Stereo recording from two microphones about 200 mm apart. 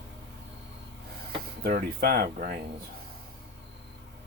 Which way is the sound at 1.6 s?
50° right (ahead or behind).